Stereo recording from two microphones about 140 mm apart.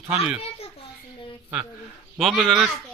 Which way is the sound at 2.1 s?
Centre (ahead or behind).